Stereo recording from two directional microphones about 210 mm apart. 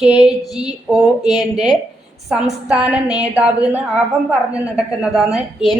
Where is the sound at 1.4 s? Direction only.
20° left (ahead or behind).